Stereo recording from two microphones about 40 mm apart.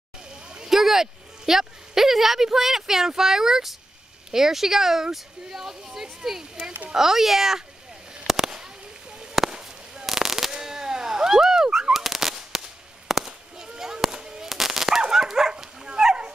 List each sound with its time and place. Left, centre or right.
0.3 s a sound: centre
0.7 s a woman's voice: centre
9.5 s a sound: right
10.0 s firecracker: centre
10.5 s whip: centre
13.1 s firecracker: centre
14.5 s dog: centre